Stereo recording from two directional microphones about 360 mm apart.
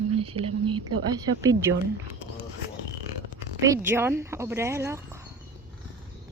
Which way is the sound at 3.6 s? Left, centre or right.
Centre.